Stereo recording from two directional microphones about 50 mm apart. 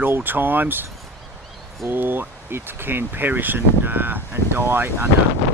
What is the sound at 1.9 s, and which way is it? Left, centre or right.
Speech, right.